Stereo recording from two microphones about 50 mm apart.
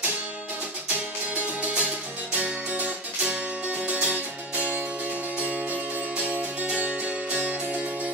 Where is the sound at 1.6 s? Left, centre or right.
Right.